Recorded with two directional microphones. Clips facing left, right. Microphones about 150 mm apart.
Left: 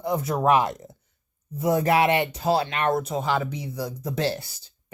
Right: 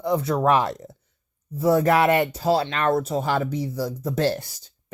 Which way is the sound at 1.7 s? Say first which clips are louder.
Right 2 dB; 45° right (ahead or behind).